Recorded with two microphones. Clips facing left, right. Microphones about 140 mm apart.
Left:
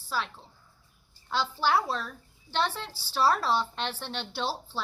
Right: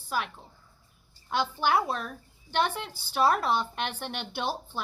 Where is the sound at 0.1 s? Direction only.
15° right (ahead or behind).